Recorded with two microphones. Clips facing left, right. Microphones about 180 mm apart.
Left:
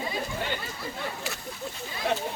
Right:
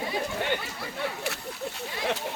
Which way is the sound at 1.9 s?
75° right (ahead or behind).